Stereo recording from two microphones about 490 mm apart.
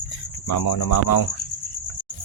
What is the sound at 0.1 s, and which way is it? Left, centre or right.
Speech, left.